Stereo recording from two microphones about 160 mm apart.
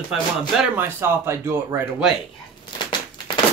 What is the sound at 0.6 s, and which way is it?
Speech, 15° right (ahead or behind).